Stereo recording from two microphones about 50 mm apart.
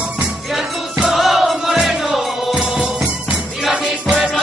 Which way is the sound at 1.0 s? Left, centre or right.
Centre.